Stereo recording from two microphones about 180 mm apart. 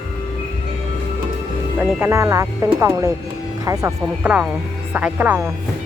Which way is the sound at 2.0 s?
15° right (ahead or behind).